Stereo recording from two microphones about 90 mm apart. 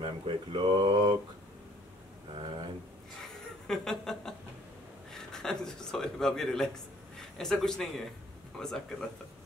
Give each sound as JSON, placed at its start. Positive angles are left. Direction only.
{"t": 0.0, "sound": "speech", "side_deg": -65}
{"t": 3.6, "sound": "a sound", "side_deg": 5}
{"t": 5.1, "sound": "a man's voice", "side_deg": 5}